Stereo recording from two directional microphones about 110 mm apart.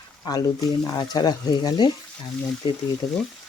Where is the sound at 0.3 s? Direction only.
35° left (ahead or behind).